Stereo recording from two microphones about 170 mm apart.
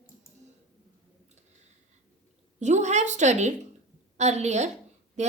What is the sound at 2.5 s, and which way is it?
A woman's voice, 45° right (ahead or behind).